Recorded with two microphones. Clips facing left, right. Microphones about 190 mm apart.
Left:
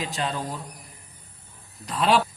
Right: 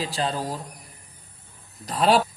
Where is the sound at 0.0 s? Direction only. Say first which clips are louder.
Right 2 dB; 35° right (ahead or behind).